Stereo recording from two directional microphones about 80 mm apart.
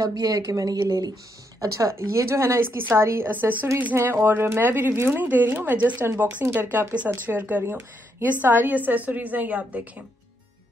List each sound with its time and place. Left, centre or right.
0.2 s a woman's voice: right
3.3 s a woman's voice: right
6.0 s a woman's voice: right
7.2 s a woman's voice: right